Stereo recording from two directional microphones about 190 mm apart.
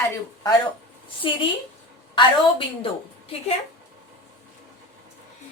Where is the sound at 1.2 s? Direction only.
25° left (ahead or behind).